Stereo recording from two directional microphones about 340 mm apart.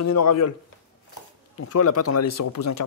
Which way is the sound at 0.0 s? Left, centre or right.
Left.